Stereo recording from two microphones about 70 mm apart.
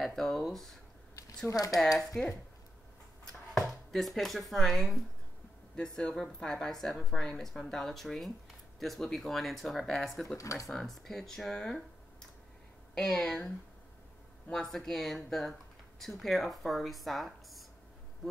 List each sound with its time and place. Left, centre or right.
0.0 s speech: centre
1.5 s speech: left
2.1 s a woman's voice: centre
3.5 s speech: centre
5.8 s a woman's voice: centre
10.2 s speech: left
10.7 s a woman's voice: centre
14.5 s speech: centre